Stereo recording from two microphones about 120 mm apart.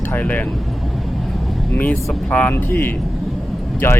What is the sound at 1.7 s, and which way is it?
Speech, 10° left (ahead or behind).